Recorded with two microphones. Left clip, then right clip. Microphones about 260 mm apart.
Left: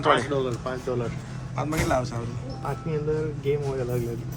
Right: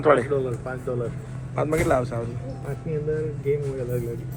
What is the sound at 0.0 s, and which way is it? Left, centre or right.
Speech, centre.